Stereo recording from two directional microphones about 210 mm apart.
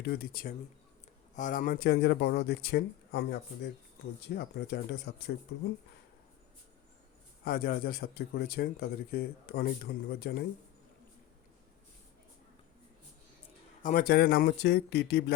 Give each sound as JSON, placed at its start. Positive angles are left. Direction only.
{"t": 0.0, "sound": "a man's voice", "side_deg": 45}
{"t": 7.4, "sound": "a man's voice", "side_deg": 45}
{"t": 13.8, "sound": "a man's voice", "side_deg": 45}